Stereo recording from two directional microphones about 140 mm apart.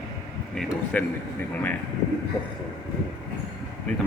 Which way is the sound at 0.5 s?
10° left (ahead or behind).